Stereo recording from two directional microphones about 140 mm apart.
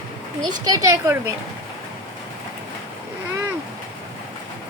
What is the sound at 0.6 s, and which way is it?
Speech, 25° right (ahead or behind).